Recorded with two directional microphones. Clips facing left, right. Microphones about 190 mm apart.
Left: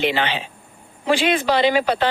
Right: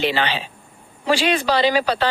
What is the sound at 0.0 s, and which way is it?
Speech, 20° left (ahead or behind).